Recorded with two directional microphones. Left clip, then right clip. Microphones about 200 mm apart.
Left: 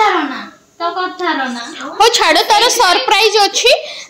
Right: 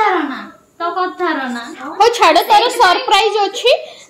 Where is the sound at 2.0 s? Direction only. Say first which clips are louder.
Even; 10° left (ahead or behind).